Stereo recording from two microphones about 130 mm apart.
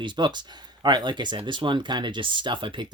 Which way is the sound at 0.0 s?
35° right (ahead or behind).